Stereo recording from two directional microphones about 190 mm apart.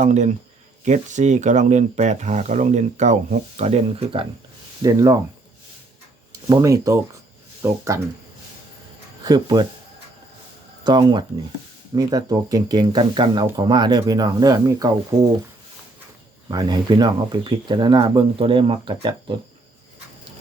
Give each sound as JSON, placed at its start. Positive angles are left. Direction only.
{"t": 0.0, "sound": "speech", "side_deg": -40}
{"t": 6.5, "sound": "speech", "side_deg": -15}
{"t": 9.2, "sound": "speech", "side_deg": -20}
{"t": 10.8, "sound": "speech", "side_deg": -20}
{"t": 16.5, "sound": "speech", "side_deg": -20}